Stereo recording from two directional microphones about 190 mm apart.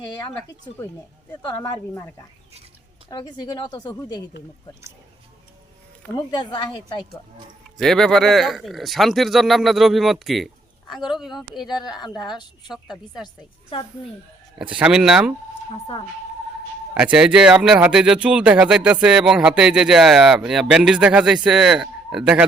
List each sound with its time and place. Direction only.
1.3 s speech: 20° left (ahead or behind)
3.1 s speech: 25° left (ahead or behind)
6.1 s speech: 25° left (ahead or behind)
7.8 s speech: centre (ahead or behind)
11.7 s speech: 20° left (ahead or behind)
12.7 s speech: centre (ahead or behind)
13.2 s speech: 30° left (ahead or behind)
14.7 s speech: 5° right (ahead or behind)
16.9 s speech: 5° right (ahead or behind)